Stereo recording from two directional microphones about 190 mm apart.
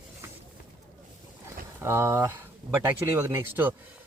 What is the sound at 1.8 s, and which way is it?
Speech, 15° right (ahead or behind).